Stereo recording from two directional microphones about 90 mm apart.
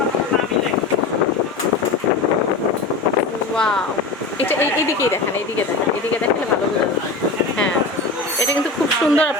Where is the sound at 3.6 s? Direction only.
10° left (ahead or behind).